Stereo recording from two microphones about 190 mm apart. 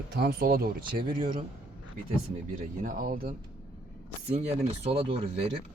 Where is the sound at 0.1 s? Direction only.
55° right (ahead or behind).